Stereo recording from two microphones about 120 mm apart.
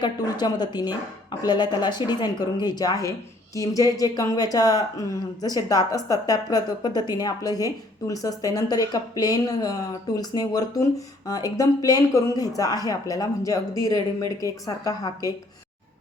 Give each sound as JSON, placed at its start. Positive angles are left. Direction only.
{"t": 0.0, "sound": "speech", "side_deg": 35}